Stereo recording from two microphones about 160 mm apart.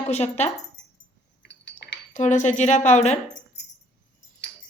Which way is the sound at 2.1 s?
50° left (ahead or behind).